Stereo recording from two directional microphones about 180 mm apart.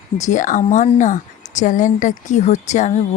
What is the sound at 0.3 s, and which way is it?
A woman's voice, 45° left (ahead or behind).